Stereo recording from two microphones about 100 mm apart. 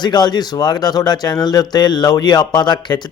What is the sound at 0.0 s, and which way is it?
A man's voice, 45° left (ahead or behind).